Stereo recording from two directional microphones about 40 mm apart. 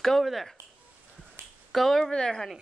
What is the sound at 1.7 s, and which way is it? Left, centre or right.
Speech, centre.